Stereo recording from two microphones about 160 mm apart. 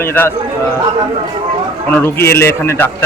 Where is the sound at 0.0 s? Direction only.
15° left (ahead or behind).